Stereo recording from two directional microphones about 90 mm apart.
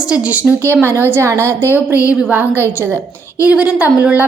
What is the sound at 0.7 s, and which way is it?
Speech, 25° right (ahead or behind).